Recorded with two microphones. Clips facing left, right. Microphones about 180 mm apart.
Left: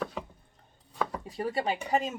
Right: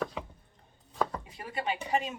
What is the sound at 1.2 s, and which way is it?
Speech, 35° left (ahead or behind).